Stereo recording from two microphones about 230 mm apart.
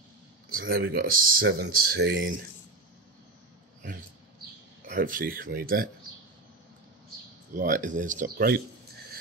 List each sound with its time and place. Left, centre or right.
0.5 s speech: right
4.8 s speech: right
7.5 s speech: right